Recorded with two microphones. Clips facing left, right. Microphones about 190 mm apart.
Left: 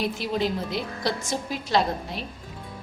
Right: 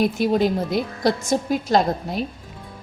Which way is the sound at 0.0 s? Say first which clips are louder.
Right 7 dB; 45° right (ahead or behind).